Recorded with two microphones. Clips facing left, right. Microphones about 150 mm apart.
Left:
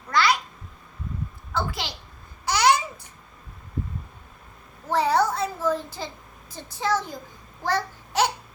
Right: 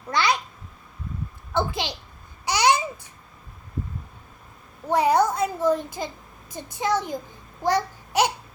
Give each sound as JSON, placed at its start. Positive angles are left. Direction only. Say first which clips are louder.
{"t": 0.1, "sound": "babbling", "louder": "left 1 dB", "side_deg": -20}
{"t": 1.5, "sound": "a sound", "louder": "right 4 dB", "side_deg": -20}
{"t": 2.4, "sound": "babbling", "louder": "even", "side_deg": -15}
{"t": 4.9, "sound": "a child's voice", "louder": "right 2 dB", "side_deg": -15}
{"t": 7.6, "sound": "babbling", "louder": "right 3 dB", "side_deg": -15}